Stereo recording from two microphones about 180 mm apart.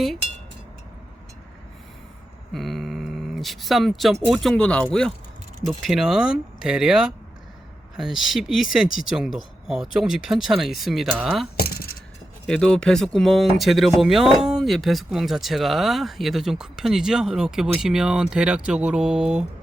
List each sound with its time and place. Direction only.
2.5 s speech: centre (ahead or behind)
11.5 s keys jangling: 60° left (ahead or behind)
12.5 s speech: 5° left (ahead or behind)